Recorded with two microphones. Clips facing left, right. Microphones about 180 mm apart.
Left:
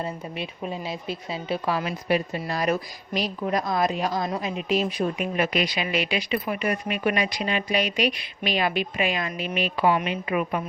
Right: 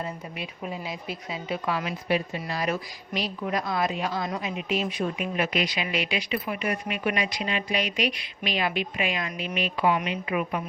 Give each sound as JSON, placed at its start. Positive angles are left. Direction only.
{"t": 0.0, "sound": "a woman's voice", "side_deg": 30}